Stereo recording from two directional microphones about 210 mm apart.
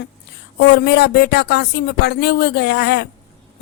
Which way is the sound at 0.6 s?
50° left (ahead or behind).